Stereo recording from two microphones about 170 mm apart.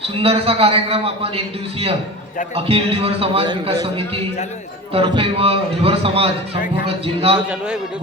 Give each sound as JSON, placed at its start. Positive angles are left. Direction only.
{"t": 0.2, "sound": "a man's voice", "side_deg": -35}
{"t": 2.6, "sound": "a man's voice", "side_deg": -35}